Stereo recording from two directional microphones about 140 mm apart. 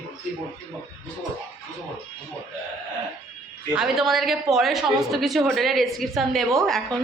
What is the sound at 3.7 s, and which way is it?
A woman's voice, 5° right (ahead or behind).